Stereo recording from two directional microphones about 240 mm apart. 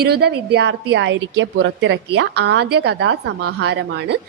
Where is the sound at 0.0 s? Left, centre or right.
Right.